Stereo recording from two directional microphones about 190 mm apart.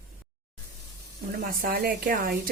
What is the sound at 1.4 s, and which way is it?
Speech, 55° right (ahead or behind).